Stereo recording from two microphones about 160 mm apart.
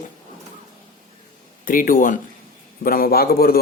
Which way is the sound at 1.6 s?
60° left (ahead or behind).